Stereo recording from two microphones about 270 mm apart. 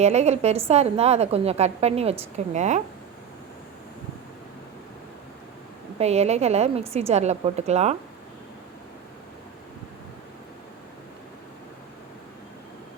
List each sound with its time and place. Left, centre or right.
0.0 s a woman's voice: right
6.0 s a woman's voice: right